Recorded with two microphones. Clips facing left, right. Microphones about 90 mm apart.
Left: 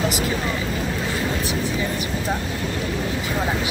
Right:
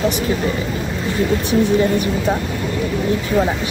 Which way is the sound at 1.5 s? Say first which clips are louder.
Right 10 dB; 35° right (ahead or behind).